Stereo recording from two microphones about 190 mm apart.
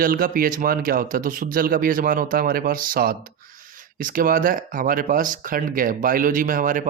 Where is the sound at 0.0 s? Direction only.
50° right (ahead or behind).